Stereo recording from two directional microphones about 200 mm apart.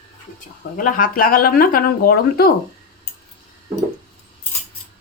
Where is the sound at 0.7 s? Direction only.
45° left (ahead or behind).